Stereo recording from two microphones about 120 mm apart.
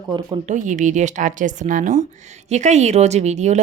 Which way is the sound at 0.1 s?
45° right (ahead or behind).